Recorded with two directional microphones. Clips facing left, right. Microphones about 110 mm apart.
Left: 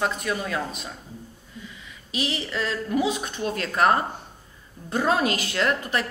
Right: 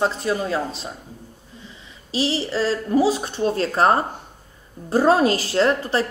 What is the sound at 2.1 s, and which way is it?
A woman's voice, 30° right (ahead or behind).